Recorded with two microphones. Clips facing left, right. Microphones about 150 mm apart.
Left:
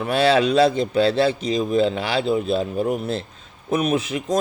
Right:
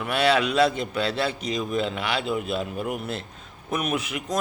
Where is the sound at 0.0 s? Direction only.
30° left (ahead or behind).